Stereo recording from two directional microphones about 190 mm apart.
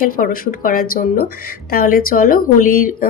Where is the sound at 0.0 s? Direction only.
45° left (ahead or behind).